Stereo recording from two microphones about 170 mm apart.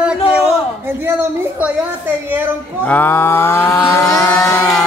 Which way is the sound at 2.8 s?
10° left (ahead or behind).